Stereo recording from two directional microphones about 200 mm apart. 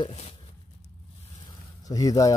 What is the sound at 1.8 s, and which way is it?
Speech, 20° left (ahead or behind).